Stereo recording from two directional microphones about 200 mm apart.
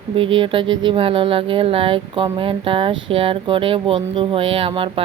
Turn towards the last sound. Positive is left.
turn(degrees=-25)  # may be behind; listen again after turning